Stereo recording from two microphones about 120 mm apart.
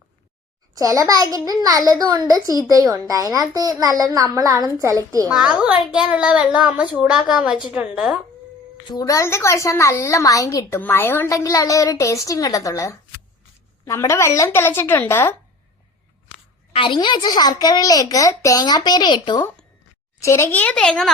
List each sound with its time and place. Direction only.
0.7 s a child's voice: 30° right (ahead or behind)
5.3 s a child's voice: 5° right (ahead or behind)
8.9 s a woman's voice: 30° left (ahead or behind)
16.7 s a woman's voice: 45° left (ahead or behind)
20.1 s a woman's voice: 25° left (ahead or behind)
20.7 s speech: 5° left (ahead or behind)